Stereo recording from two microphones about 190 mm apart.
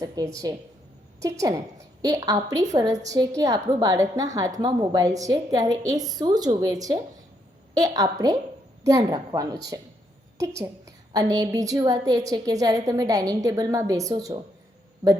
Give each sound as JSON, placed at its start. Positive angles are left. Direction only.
{"t": 0.0, "sound": "a woman's voice", "side_deg": -20}